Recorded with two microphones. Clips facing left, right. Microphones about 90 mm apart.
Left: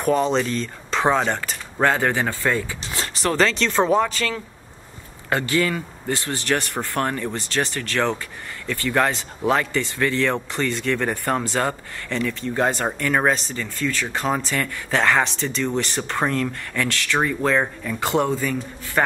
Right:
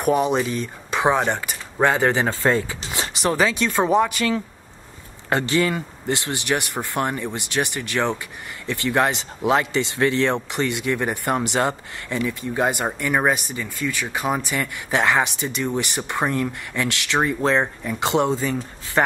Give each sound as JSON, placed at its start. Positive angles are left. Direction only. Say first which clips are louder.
{"t": 0.0, "sound": "a man's voice", "louder": "even", "side_deg": -15}